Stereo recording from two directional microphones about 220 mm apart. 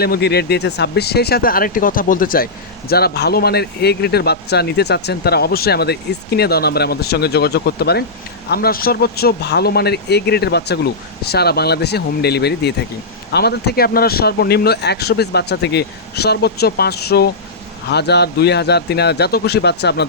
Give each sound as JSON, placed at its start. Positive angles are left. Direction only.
{"t": 0.0, "sound": "speech", "side_deg": 45}